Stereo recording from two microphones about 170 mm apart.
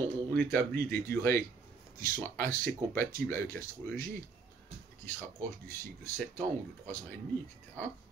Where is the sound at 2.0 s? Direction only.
15° left (ahead or behind).